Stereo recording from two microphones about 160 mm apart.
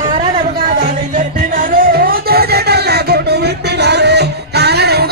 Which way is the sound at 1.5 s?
60° right (ahead or behind).